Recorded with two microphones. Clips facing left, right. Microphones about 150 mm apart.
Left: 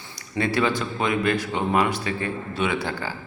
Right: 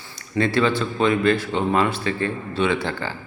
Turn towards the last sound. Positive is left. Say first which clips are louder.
# right 3 dB
turn(degrees=10)  # may be behind; listen again after turning